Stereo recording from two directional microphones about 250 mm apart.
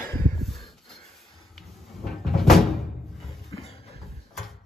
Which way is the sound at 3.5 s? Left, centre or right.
Left.